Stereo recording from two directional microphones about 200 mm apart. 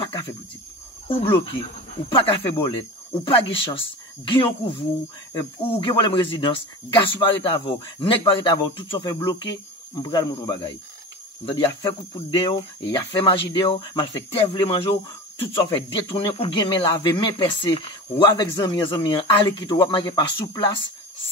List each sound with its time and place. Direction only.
0.0 s cricket: 25° left (ahead or behind)
1.0 s speech: 25° left (ahead or behind)